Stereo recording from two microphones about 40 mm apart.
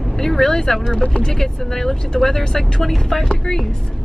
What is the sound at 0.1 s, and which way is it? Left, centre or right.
Speech, centre.